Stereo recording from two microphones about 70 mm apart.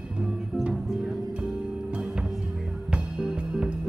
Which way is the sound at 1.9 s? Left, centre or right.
Centre.